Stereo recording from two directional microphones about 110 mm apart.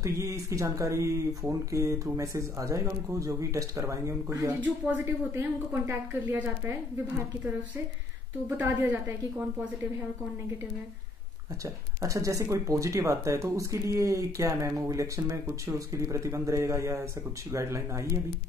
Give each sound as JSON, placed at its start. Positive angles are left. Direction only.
{"t": 0.0, "sound": "a woman's voice", "side_deg": -30}
{"t": 11.6, "sound": "speech", "side_deg": -30}